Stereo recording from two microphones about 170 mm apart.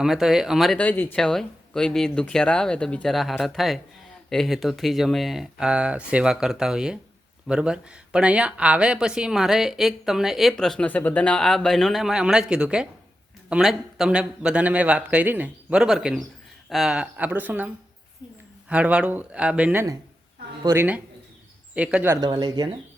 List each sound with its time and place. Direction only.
0.0 s speech: centre (ahead or behind)
18.7 s speech: 5° right (ahead or behind)
22.1 s speech: 25° right (ahead or behind)